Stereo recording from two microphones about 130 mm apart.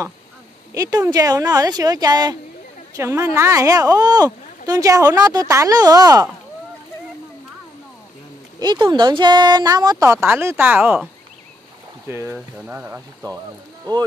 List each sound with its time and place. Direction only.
0.7 s speech: 25° right (ahead or behind)
3.0 s speech: 20° right (ahead or behind)
8.5 s speech: 35° right (ahead or behind); by 11.1 s 10° right (ahead or behind)
12.1 s speech: 20° right (ahead or behind)
12.4 s speech: 10° right (ahead or behind)